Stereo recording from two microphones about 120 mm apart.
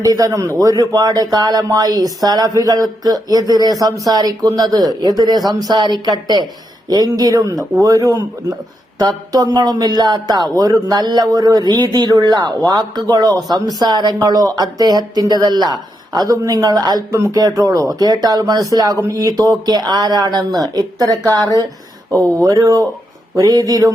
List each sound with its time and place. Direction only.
0.0 s a man's voice: 30° right (ahead or behind)